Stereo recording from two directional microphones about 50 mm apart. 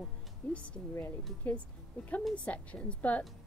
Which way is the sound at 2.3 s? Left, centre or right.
Left.